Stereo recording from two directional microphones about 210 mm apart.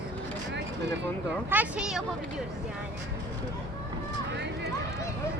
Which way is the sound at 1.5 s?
5° right (ahead or behind).